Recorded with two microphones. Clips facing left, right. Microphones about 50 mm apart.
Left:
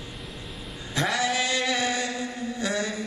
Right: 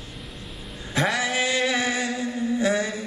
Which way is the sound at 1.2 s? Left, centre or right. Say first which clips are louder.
Right 2 dB; centre.